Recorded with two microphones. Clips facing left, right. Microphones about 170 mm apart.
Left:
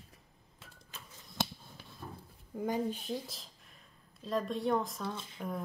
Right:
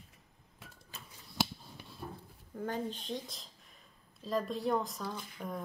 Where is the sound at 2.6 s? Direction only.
10° left (ahead or behind).